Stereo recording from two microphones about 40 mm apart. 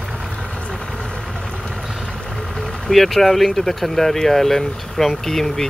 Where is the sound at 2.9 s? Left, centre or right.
Centre.